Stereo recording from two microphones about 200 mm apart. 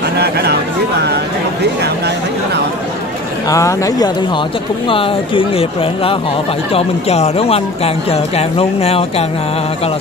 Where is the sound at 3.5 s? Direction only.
15° left (ahead or behind).